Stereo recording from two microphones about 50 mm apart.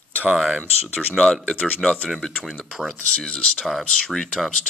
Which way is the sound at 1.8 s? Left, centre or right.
Centre.